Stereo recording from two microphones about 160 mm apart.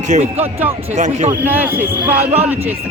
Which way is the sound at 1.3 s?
15° right (ahead or behind).